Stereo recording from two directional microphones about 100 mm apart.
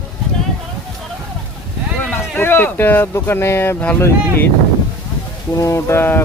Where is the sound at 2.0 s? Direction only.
20° left (ahead or behind).